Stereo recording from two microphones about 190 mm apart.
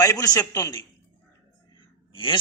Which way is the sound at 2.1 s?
25° left (ahead or behind).